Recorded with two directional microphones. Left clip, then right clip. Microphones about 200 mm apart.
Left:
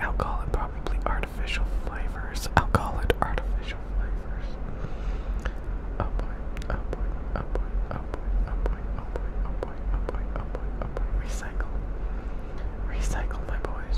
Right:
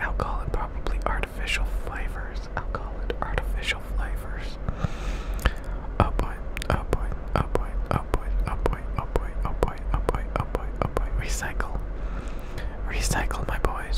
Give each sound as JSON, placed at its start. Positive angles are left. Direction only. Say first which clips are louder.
{"t": 0.0, "sound": "whispering", "louder": "even", "side_deg": 0}
{"t": 2.5, "sound": "whispering", "louder": "left 10 dB", "side_deg": 20}
{"t": 3.7, "sound": "a sound", "louder": "right 11 dB", "side_deg": -25}
{"t": 5.9, "sound": "whispering", "louder": "right 9 dB", "side_deg": -20}
{"t": 12.9, "sound": "whispering", "louder": "right 8 dB", "side_deg": -15}